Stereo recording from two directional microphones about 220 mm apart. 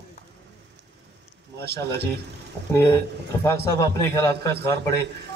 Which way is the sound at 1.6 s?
50° right (ahead or behind).